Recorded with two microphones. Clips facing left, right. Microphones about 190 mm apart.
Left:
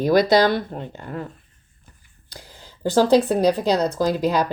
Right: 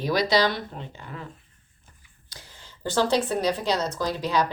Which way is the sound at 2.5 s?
40° left (ahead or behind).